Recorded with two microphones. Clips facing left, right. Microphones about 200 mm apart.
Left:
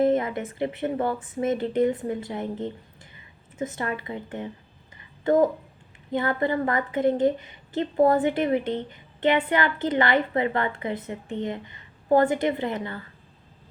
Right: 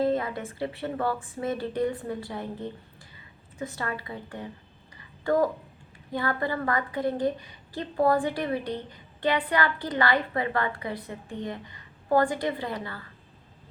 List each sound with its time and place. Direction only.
0.0 s a woman's voice: 20° left (ahead or behind)